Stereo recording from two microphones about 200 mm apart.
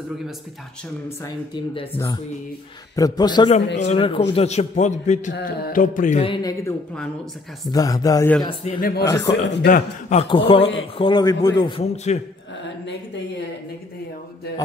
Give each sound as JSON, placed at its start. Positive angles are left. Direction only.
{"t": 1.0, "sound": "a man's voice", "side_deg": 15}
{"t": 7.7, "sound": "a man's voice", "side_deg": 20}
{"t": 8.5, "sound": "a man's voice", "side_deg": 25}
{"t": 8.8, "sound": "speech", "side_deg": 55}
{"t": 9.1, "sound": "a man's voice", "side_deg": 15}
{"t": 9.7, "sound": "speech", "side_deg": 40}
{"t": 10.3, "sound": "a man's voice", "side_deg": 25}